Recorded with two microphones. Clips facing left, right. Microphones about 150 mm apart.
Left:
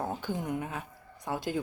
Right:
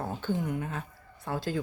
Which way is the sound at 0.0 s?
15° left (ahead or behind).